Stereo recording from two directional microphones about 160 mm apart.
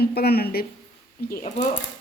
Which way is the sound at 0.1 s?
75° left (ahead or behind).